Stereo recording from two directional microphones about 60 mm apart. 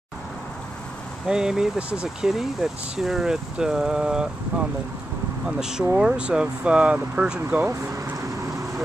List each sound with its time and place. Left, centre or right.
1.2 s speech: centre
2.2 s speech: centre
5.6 s speech: centre
7.5 s speech: right